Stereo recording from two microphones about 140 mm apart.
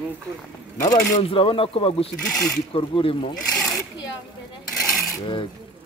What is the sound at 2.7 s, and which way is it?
Speech, 40° left (ahead or behind).